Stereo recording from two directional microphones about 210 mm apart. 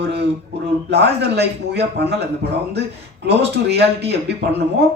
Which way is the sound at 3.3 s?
50° right (ahead or behind).